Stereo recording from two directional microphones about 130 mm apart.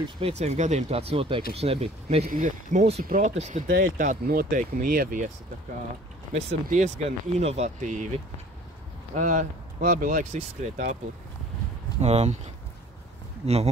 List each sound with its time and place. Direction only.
0.2 s speech: 55° right (ahead or behind); by 5.3 s 90° right
6.3 s speech: 60° right (ahead or behind)
9.1 s speech: 75° right (ahead or behind)
10.3 s speech: 60° right (ahead or behind)
12.0 s speech: 55° right (ahead or behind)
13.4 s speech: 50° right (ahead or behind)